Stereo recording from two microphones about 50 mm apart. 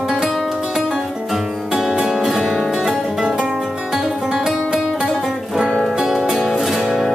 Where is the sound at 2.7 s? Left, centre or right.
Centre.